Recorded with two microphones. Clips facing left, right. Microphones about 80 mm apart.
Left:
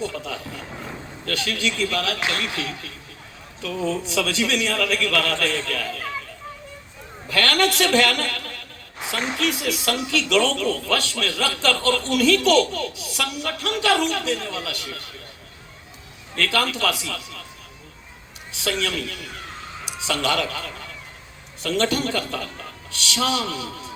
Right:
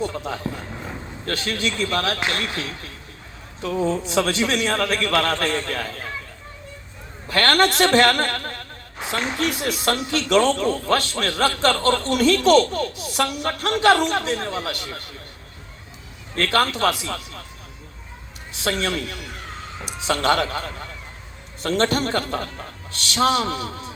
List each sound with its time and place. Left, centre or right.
0.0 s a man's voice: right
7.3 s a man's voice: right
16.3 s a man's voice: right
18.6 s a man's voice: right